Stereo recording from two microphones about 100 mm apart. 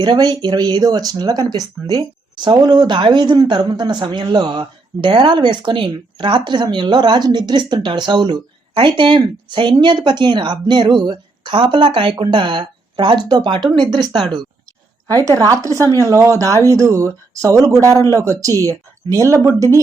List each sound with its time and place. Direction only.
0.0 s speech: 45° right (ahead or behind)
15.0 s speech: 35° right (ahead or behind)